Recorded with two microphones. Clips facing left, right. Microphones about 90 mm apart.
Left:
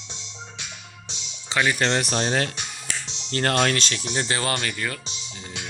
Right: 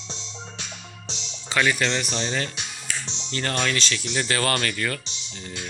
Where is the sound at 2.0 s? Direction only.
55° left (ahead or behind); by 4.4 s 30° left (ahead or behind).